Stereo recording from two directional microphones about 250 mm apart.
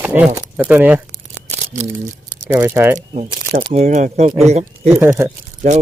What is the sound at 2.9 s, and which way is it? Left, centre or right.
Speech, right.